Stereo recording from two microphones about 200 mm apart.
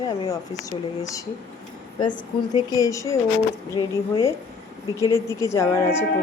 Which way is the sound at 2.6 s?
15° left (ahead or behind).